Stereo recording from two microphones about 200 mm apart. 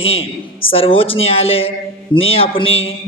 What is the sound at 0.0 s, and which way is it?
Speech, 30° left (ahead or behind).